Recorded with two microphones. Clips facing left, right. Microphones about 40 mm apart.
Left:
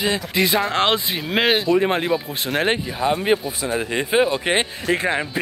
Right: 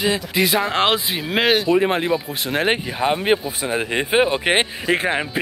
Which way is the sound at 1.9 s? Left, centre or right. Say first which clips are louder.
Right 1 dB; centre.